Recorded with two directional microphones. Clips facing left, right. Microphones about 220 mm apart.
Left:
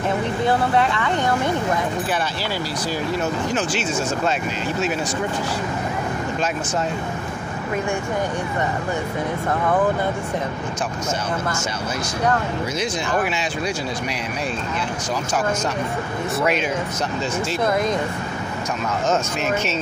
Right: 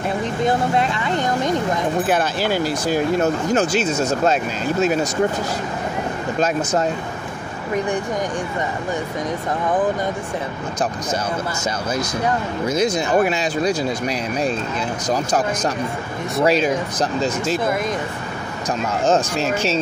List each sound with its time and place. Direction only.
0.5 s speech: 15° right (ahead or behind)
2.0 s speech: 50° right (ahead or behind)
12.7 s speech: 40° right (ahead or behind)
16.4 s speech: 35° right (ahead or behind)
19.0 s speech: 30° right (ahead or behind)